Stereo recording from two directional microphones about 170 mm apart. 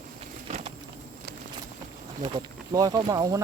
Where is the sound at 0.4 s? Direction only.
40° right (ahead or behind).